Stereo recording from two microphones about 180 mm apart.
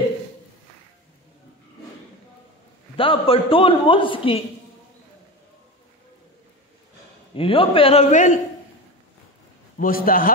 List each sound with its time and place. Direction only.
3.0 s a man's voice: 30° left (ahead or behind)
7.3 s a man's voice: 30° left (ahead or behind)
9.8 s a man's voice: 50° left (ahead or behind)